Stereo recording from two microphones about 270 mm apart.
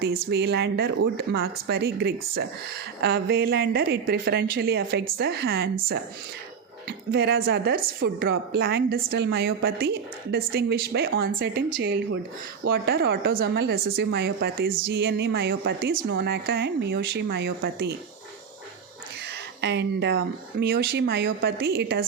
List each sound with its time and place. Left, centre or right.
0.0 s speech: right
6.8 s a woman's voice: right
19.6 s speech: right